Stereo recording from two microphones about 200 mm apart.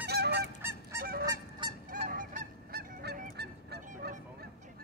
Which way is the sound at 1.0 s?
50° right (ahead or behind).